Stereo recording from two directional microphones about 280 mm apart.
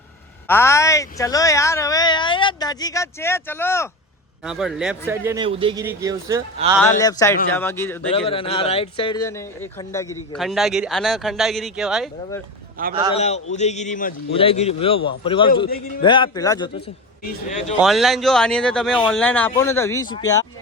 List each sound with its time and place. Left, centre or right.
0.4 s a man's voice: centre
6.7 s speech: centre
8.1 s speech: centre
10.3 s speech: centre
12.8 s a man's voice: right
13.1 s a man's voice: left
17.7 s speech: centre